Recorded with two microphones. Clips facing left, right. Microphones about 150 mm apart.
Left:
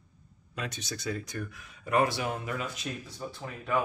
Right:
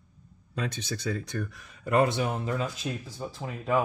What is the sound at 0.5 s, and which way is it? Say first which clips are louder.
Speech: right 4 dB; 30° right (ahead or behind).